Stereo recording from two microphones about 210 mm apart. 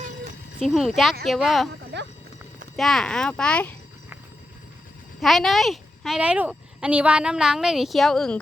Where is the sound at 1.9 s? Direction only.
55° right (ahead or behind).